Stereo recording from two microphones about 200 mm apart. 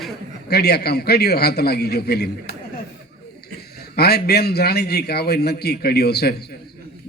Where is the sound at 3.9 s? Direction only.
55° left (ahead or behind).